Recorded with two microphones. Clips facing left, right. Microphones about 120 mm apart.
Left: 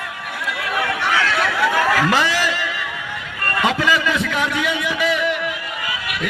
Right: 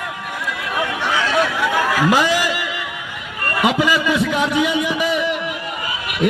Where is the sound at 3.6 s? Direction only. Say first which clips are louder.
Right 2 dB; 15° right (ahead or behind).